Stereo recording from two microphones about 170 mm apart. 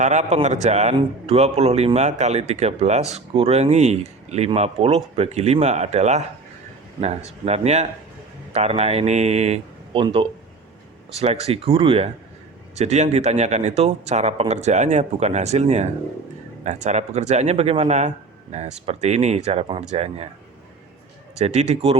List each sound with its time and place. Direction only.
0.0 s a man's voice: 45° right (ahead or behind)
7.4 s a man's voice: 40° right (ahead or behind)
21.3 s a man's voice: 40° right (ahead or behind)